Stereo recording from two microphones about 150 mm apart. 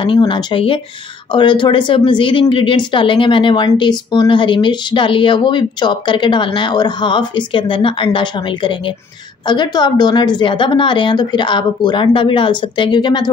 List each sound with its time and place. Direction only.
0.3 s speech: 30° left (ahead or behind)